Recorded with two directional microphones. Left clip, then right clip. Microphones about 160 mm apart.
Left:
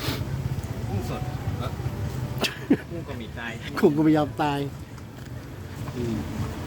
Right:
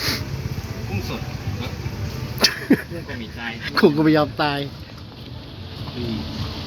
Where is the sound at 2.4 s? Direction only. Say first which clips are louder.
Right 7 dB; 5° right (ahead or behind).